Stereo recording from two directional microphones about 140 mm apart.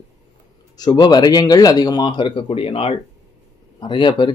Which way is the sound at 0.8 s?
30° left (ahead or behind).